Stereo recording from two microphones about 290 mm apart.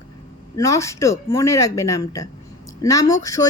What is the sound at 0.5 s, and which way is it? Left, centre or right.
A woman's voice, centre.